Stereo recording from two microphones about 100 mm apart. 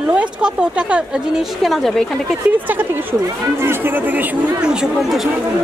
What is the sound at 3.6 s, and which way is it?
Speech, 20° right (ahead or behind).